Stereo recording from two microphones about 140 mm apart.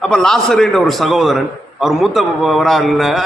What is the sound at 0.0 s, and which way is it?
A man's voice, 5° left (ahead or behind).